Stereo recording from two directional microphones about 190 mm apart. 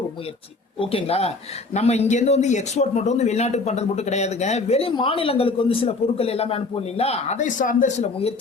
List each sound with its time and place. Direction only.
0.8 s speech: 30° left (ahead or behind)